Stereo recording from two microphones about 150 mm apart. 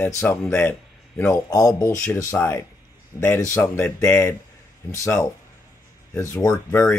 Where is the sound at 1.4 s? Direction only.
25° left (ahead or behind).